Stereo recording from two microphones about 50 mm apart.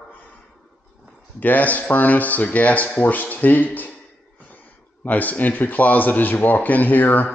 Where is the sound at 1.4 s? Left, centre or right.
Left.